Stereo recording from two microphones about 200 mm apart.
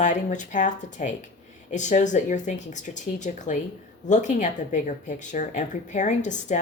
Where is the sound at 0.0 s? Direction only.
35° left (ahead or behind).